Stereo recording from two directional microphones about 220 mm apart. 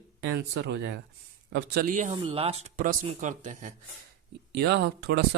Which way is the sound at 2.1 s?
25° right (ahead or behind).